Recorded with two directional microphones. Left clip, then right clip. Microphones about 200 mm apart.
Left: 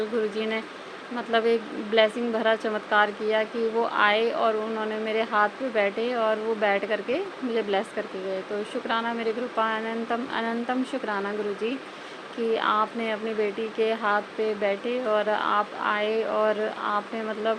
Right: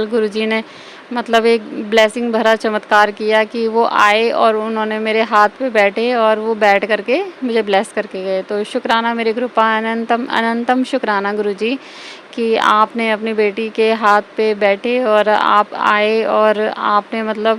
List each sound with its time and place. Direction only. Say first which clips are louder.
0.0 s speech: right 10 dB; 55° right (ahead or behind)